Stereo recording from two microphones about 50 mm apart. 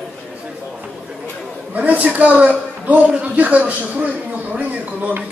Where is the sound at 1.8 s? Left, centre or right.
Right.